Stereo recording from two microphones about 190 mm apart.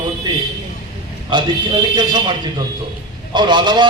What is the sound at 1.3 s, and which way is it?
Speech, 25° right (ahead or behind).